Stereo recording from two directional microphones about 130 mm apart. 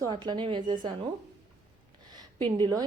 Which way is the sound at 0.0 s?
35° right (ahead or behind).